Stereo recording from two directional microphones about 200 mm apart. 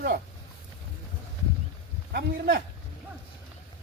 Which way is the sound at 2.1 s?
50° right (ahead or behind).